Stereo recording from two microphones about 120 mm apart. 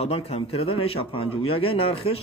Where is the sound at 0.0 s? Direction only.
55° left (ahead or behind).